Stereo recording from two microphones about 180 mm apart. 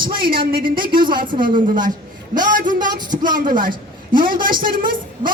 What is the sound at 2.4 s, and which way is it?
Speech, 50° right (ahead or behind).